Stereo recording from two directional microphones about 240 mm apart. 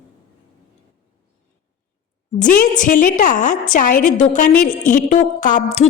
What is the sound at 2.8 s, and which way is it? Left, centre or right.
A woman's voice, left.